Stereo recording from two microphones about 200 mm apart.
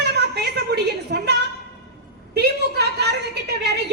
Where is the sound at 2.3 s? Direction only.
55° right (ahead or behind).